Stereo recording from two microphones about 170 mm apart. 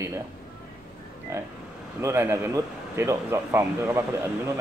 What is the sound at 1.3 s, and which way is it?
Speech, 15° right (ahead or behind).